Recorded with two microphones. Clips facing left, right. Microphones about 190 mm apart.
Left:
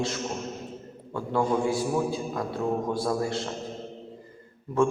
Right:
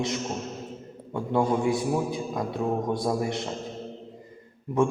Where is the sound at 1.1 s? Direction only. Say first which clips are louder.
Right 1 dB; 20° right (ahead or behind).